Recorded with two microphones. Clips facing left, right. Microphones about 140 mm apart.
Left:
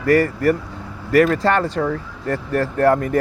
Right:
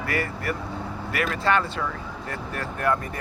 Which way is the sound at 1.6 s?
55° left (ahead or behind).